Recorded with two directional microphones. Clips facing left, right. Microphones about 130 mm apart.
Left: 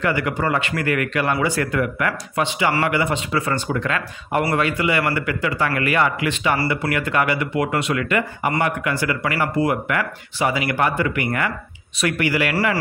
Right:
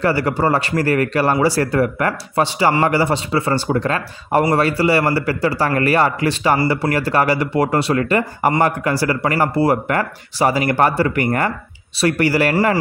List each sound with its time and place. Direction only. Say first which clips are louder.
0.0 s a man's voice: right 4 dB; 35° right (ahead or behind)